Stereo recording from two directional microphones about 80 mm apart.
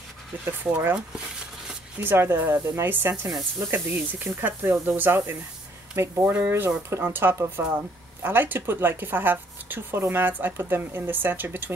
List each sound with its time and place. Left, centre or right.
0.5 s speech: right
2.0 s speech: right